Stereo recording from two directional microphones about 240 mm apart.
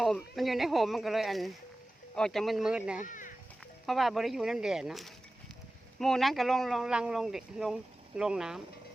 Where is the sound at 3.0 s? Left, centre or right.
Left.